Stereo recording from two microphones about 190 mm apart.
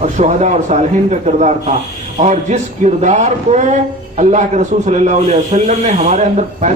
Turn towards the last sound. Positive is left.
turn(degrees=-40)  # may be behind; listen again after turning